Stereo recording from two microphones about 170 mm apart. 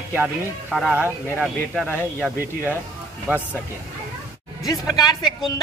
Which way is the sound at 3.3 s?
15° right (ahead or behind).